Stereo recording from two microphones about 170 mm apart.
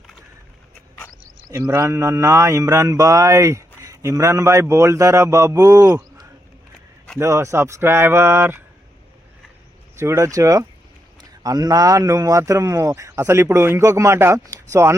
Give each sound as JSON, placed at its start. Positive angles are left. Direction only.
{"t": 1.5, "sound": "mantra", "side_deg": -20}
{"t": 9.9, "sound": "mantra", "side_deg": -15}